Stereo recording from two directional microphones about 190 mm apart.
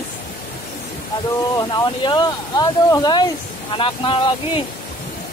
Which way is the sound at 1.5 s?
20° left (ahead or behind).